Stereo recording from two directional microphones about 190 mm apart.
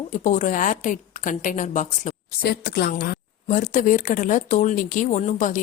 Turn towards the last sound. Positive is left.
turn(degrees=40)  # may be behind; listen again after turning